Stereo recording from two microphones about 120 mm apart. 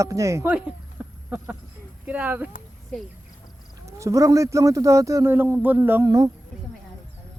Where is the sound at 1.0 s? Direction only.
15° right (ahead or behind).